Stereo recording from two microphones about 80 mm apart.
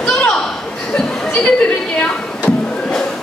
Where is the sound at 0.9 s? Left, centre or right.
Centre.